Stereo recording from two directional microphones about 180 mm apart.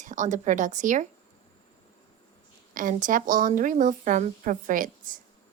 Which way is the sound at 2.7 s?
45° right (ahead or behind).